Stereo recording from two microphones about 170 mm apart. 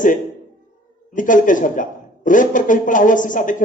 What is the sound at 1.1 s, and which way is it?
A woman's voice, 50° left (ahead or behind).